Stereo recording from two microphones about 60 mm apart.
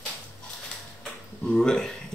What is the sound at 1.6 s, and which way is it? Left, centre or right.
Speech, centre.